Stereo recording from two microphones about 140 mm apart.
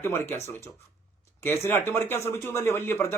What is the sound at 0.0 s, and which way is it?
Speech, 15° left (ahead or behind).